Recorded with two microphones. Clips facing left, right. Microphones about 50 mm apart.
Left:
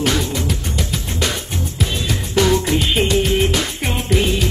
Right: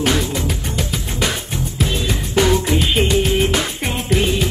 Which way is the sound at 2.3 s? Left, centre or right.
Centre.